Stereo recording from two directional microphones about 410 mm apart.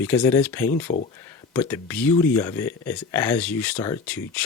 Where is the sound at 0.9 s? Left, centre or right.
Centre.